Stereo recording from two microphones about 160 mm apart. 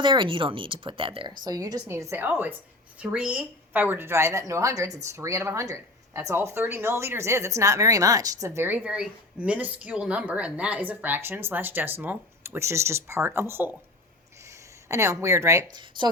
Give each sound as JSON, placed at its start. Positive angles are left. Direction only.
{"t": 0.0, "sound": "a woman's voice", "side_deg": -30}
{"t": 14.8, "sound": "a woman's voice", "side_deg": -20}